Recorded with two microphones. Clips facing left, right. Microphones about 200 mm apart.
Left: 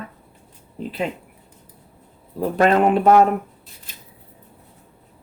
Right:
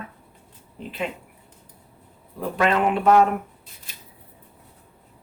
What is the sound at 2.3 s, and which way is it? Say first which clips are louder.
Speech: left 5 dB; 40° left (ahead or behind).